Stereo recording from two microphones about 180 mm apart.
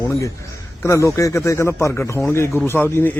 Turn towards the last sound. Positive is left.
turn(degrees=10)  # may be behind; listen again after turning